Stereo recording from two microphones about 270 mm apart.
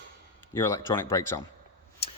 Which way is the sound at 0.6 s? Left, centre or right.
Centre.